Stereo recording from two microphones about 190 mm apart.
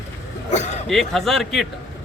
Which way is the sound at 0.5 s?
35° left (ahead or behind).